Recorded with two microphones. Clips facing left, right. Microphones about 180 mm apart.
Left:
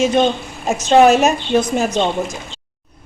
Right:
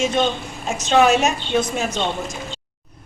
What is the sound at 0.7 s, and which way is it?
Speech, 45° left (ahead or behind).